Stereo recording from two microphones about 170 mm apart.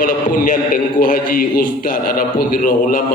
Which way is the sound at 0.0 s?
55° left (ahead or behind).